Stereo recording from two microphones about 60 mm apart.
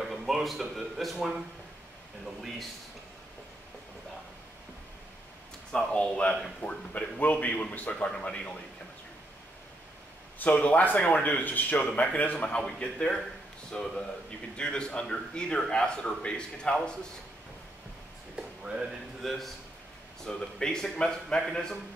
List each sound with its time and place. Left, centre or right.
0.0 s speech: centre
5.9 s speech: centre
10.5 s speech: left
11.8 s speech: centre
12.5 s a man's voice: centre
18.3 s a sound: centre
19.2 s a man's voice: centre